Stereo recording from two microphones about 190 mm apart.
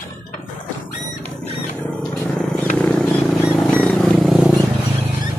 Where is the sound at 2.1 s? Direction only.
Centre (ahead or behind).